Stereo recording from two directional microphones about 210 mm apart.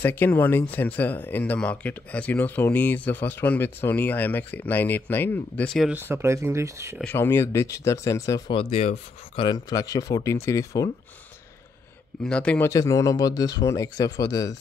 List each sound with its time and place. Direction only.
0.0 s speech: 10° left (ahead or behind); by 7.0 s 15° right (ahead or behind)
7.0 s speech: 10° left (ahead or behind)
12.3 s speech: 5° left (ahead or behind)